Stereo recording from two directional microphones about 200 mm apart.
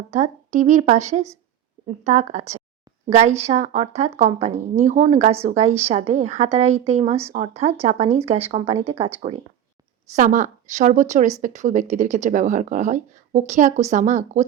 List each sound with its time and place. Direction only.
0.1 s speech: 35° right (ahead or behind)
10.1 s speech: 40° right (ahead or behind)